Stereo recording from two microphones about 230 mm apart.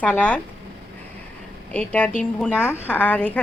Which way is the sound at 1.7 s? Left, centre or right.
Centre.